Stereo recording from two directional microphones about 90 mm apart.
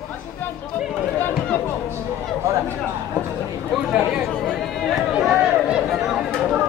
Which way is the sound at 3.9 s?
5° right (ahead or behind).